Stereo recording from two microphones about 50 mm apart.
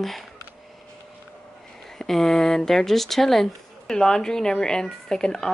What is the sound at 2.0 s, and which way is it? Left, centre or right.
Speech, centre.